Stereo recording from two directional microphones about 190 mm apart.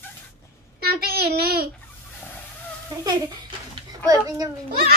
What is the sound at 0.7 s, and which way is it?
Child singing, 55° right (ahead or behind).